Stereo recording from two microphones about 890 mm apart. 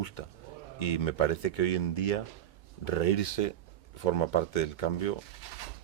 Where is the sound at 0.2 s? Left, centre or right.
Left.